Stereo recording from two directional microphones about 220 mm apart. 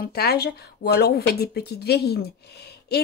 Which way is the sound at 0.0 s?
45° left (ahead or behind).